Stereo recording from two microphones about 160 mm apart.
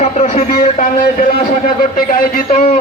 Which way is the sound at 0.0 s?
45° left (ahead or behind).